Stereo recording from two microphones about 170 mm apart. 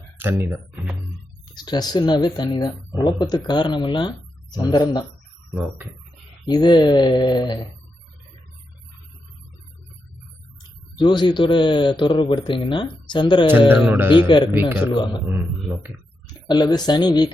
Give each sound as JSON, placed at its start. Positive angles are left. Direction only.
{"t": 0.2, "sound": "speech", "side_deg": -15}
{"t": 1.5, "sound": "speech", "side_deg": 25}
{"t": 5.5, "sound": "speech", "side_deg": -10}
{"t": 6.4, "sound": "speech", "side_deg": 25}
{"t": 10.9, "sound": "speech", "side_deg": 25}
{"t": 13.7, "sound": "speech", "side_deg": -10}
{"t": 14.9, "sound": "speech", "side_deg": 25}
{"t": 16.2, "sound": "speech", "side_deg": 25}